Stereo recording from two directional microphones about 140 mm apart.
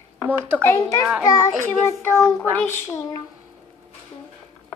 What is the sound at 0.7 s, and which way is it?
A child's voice, 25° left (ahead or behind).